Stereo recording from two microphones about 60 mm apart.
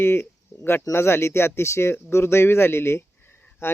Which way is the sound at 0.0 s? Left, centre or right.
Left.